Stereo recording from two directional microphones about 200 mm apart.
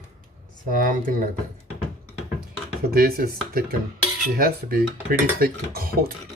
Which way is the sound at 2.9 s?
50° right (ahead or behind).